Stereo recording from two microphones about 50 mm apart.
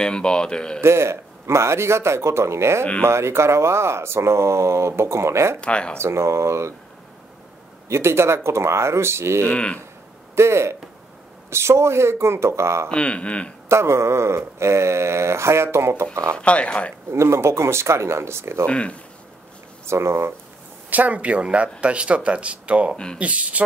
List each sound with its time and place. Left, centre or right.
0.0 s speech: centre
0.7 s speech: right
2.8 s speech: left
3.1 s speech: right
5.6 s speech: left
5.9 s speech: right
7.9 s speech: right
12.9 s speech: left
13.7 s speech: right
16.3 s speech: left
17.1 s speech: right
18.7 s speech: left
19.9 s speech: right
20.9 s speech: right